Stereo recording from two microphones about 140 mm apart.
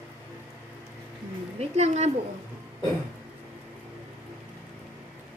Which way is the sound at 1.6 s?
55° right (ahead or behind).